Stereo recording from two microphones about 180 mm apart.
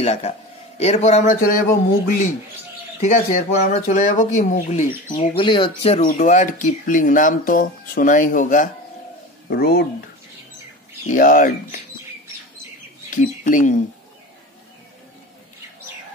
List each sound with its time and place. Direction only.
0.0 s speech: 35° left (ahead or behind)
3.0 s speech: 40° left (ahead or behind)
6.0 s speech: 45° left (ahead or behind)
9.5 s speech: 60° left (ahead or behind)
11.1 s speech: 50° left (ahead or behind)
13.1 s speech: 45° left (ahead or behind)